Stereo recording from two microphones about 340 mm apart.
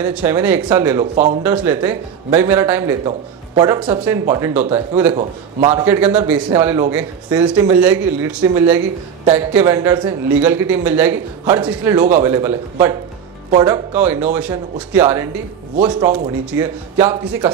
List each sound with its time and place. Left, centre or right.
0.0 s a man's voice: centre
1.1 s speech: centre
1.4 s a man's voice: centre
13.6 s a man's voice: centre
15.7 s a man's voice: centre